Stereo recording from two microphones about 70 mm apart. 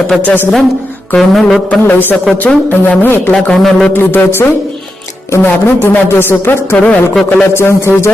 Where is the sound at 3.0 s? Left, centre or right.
Left.